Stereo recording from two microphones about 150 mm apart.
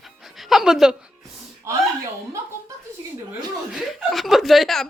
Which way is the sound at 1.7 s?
20° right (ahead or behind).